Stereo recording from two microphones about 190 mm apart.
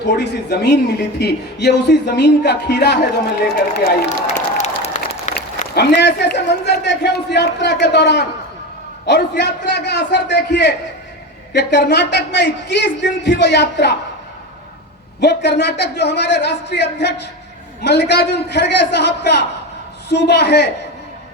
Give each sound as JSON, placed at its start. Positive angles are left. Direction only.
{"t": 0.0, "sound": "a man's voice", "side_deg": 65}
{"t": 4.1, "sound": "applause", "side_deg": 40}
{"t": 5.3, "sound": "a man's voice", "side_deg": 60}
{"t": 15.2, "sound": "a man's voice", "side_deg": 60}